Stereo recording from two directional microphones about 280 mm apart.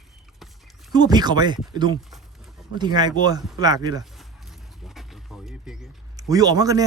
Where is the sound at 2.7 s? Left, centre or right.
Centre.